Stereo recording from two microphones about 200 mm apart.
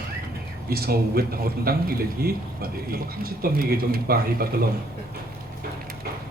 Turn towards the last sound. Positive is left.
turn(degrees=-50)  # may be behind; listen again after turning